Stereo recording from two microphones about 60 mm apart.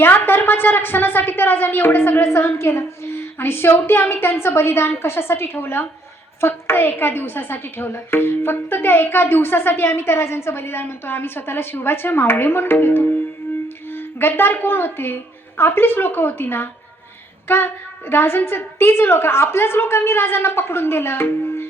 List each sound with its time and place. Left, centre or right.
0.0 s a woman's voice: left